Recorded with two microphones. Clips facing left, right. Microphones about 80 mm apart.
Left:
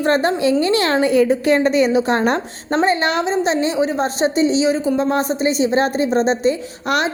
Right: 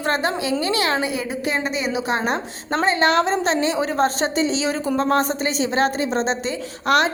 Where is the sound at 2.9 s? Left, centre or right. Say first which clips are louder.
Even; right.